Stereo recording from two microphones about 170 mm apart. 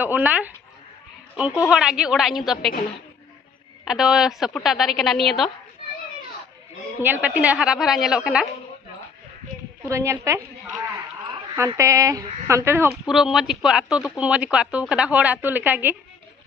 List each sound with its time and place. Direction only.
0.0 s speech: 10° right (ahead or behind)
1.6 s a woman's voice: 5° right (ahead or behind)
3.8 s a woman's voice: 5° right (ahead or behind)
7.0 s a woman's voice: 10° right (ahead or behind)
9.8 s speech: 15° right (ahead or behind)
11.5 s speech: 15° right (ahead or behind)
13.0 s speech: centre (ahead or behind)